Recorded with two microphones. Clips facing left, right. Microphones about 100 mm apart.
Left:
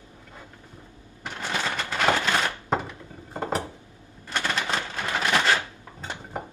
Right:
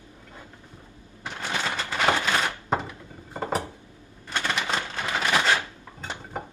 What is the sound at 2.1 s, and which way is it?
Typewriter, 5° right (ahead or behind).